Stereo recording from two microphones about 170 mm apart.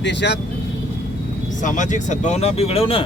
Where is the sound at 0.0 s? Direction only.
90° left.